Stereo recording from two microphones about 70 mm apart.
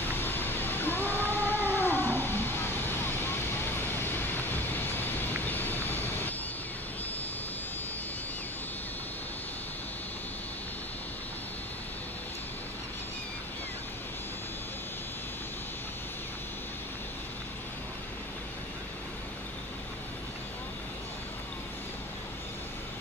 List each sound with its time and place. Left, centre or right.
0.0 s cat: left